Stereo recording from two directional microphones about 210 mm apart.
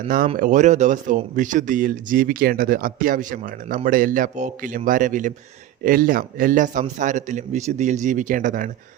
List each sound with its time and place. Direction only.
0.3 s speech: 35° right (ahead or behind)